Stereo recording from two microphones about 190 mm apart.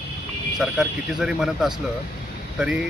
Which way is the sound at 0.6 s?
Centre (ahead or behind).